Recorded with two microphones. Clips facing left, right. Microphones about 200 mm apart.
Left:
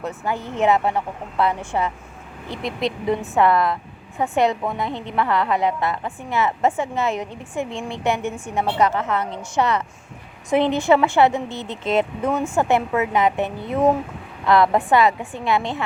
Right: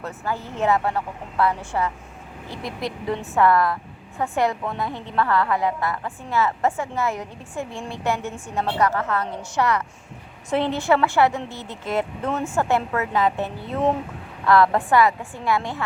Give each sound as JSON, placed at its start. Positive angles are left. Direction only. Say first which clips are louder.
{"t": 0.3, "sound": "a woman's voice", "louder": "left 3 dB", "side_deg": 20}